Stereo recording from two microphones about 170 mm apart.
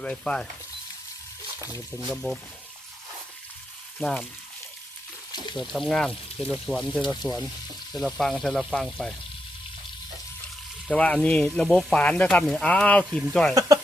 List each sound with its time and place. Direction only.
0.0 s speech: 5° left (ahead or behind)
2.0 s speech: centre (ahead or behind)
4.0 s speech: 10° left (ahead or behind)
5.5 s speech: centre (ahead or behind)
10.8 s speech: 5° left (ahead or behind)
13.5 s speech: 20° right (ahead or behind)